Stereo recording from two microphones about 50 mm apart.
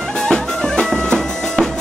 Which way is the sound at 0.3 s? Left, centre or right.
Centre.